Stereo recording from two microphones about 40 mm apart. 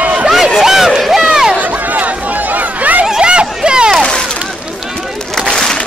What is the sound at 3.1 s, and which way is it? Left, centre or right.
Hubbub, right.